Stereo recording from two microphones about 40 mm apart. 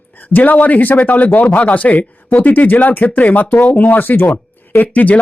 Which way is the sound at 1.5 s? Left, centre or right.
Left.